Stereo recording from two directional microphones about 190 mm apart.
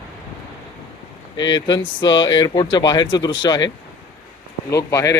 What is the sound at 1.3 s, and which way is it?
Speech, 20° left (ahead or behind).